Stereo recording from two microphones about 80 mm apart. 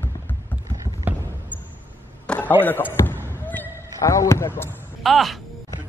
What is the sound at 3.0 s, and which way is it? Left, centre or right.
Basketball bounce, left.